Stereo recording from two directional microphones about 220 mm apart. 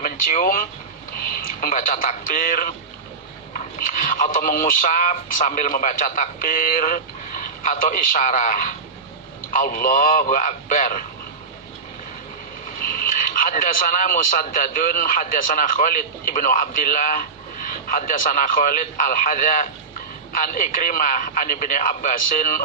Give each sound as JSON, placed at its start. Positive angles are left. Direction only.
{"t": 0.0, "sound": "speech", "side_deg": 40}
{"t": 12.9, "sound": "speech", "side_deg": 40}